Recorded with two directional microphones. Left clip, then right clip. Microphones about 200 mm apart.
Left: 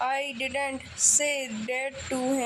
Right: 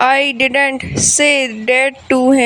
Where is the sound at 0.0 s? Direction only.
45° right (ahead or behind).